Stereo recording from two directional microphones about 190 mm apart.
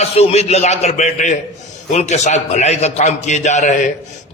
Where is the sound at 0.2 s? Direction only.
35° left (ahead or behind).